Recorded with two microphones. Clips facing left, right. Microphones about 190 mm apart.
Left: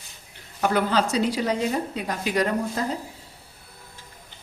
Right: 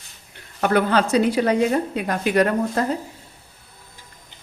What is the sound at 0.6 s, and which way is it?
A woman's voice, 60° right (ahead or behind).